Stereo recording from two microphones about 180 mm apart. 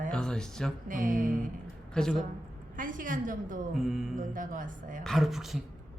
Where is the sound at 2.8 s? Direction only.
45° right (ahead or behind).